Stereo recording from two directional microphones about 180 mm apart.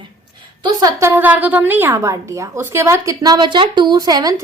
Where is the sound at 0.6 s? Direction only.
20° right (ahead or behind).